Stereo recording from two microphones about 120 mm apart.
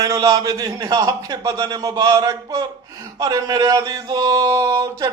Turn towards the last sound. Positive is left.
turn(degrees=-25)  # may be behind; listen again after turning